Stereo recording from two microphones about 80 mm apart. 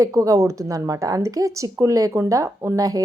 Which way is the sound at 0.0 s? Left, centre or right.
Right.